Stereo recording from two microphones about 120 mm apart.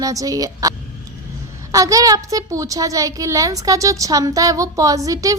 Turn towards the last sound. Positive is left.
turn(degrees=-30)  # may be behind; listen again after turning